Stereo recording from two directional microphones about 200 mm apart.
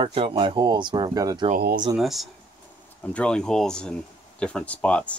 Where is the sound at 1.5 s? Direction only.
45° right (ahead or behind).